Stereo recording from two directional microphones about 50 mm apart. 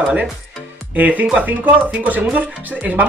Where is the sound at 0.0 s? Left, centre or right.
Right.